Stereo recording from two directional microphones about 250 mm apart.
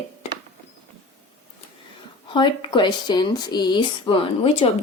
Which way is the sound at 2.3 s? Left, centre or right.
Centre.